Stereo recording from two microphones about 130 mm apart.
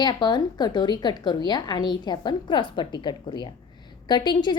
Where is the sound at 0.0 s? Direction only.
35° left (ahead or behind).